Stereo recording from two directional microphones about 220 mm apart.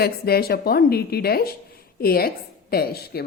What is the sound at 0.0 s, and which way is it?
A woman's voice, 45° left (ahead or behind).